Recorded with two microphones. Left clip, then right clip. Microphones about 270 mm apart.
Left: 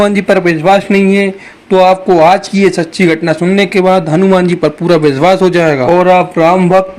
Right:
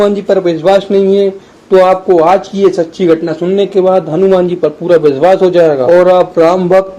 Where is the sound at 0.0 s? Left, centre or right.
Left.